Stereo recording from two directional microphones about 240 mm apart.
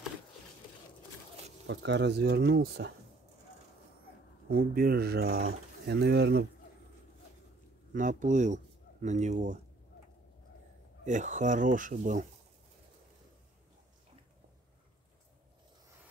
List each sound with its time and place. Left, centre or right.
1.7 s speech: right
4.5 s speech: right
7.9 s speech: right
11.1 s speech: right